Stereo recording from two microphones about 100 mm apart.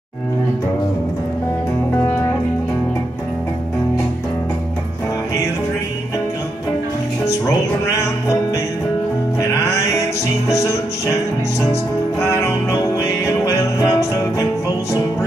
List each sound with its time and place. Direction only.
7.2 s music: 30° left (ahead or behind)
9.4 s music: 30° left (ahead or behind)